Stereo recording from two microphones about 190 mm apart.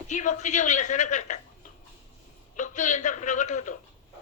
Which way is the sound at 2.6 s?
40° left (ahead or behind).